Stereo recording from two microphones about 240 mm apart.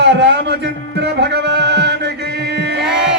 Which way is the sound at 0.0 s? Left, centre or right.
Right.